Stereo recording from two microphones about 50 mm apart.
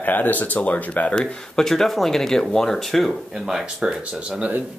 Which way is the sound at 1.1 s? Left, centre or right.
Centre.